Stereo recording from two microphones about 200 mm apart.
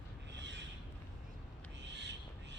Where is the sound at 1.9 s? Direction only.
60° right (ahead or behind).